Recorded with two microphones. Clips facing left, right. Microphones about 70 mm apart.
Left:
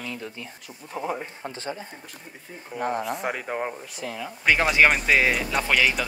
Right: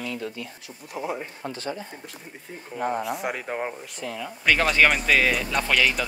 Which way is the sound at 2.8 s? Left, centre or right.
Centre.